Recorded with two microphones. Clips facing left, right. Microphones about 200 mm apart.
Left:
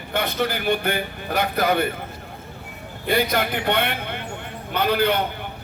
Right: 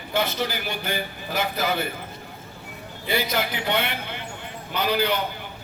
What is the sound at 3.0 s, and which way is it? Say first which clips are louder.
Speech: left 4 dB; 55° left (ahead or behind).